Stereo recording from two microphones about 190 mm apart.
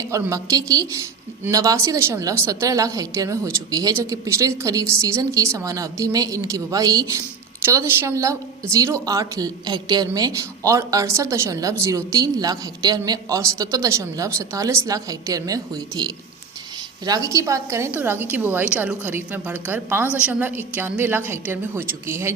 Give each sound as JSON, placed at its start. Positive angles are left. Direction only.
{"t": 0.1, "sound": "a woman's voice", "side_deg": -15}